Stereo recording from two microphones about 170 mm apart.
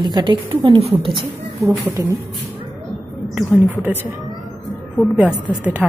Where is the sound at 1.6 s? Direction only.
15° right (ahead or behind).